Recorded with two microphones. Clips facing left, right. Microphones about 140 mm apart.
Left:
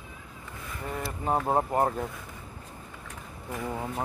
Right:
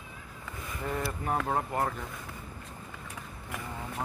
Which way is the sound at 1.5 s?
30° left (ahead or behind).